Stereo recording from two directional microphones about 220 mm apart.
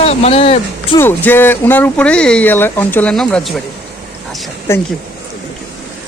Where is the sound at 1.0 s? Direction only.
10° left (ahead or behind).